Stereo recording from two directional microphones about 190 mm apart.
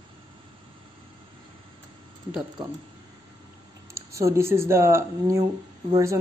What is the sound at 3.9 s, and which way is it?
Speech, 15° right (ahead or behind).